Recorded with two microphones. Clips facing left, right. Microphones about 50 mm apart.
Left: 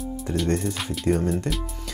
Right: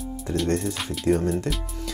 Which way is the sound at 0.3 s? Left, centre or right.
Centre.